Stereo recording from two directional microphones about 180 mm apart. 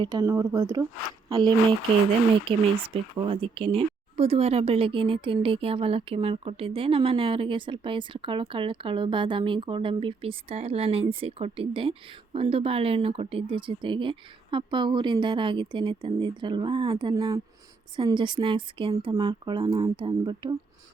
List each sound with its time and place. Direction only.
0.0 s speech: 20° right (ahead or behind)